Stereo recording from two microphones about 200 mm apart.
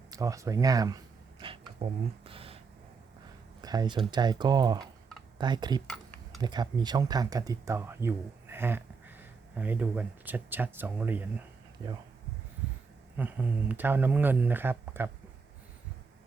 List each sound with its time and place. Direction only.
0.1 s a sound: 15° right (ahead or behind)
3.6 s speech: 20° right (ahead or behind)
13.1 s speech: 10° right (ahead or behind)